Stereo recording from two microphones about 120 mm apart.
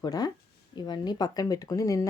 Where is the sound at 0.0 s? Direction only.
35° left (ahead or behind).